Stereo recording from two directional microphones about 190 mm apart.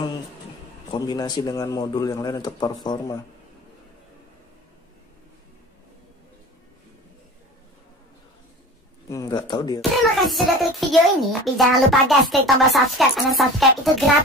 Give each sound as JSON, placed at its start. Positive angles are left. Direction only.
{"t": 0.9, "sound": "a man's voice", "side_deg": 20}
{"t": 9.1, "sound": "speech", "side_deg": 20}
{"t": 9.8, "sound": "a child's voice", "side_deg": 0}